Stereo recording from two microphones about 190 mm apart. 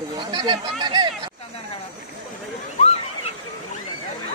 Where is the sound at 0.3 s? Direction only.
20° right (ahead or behind).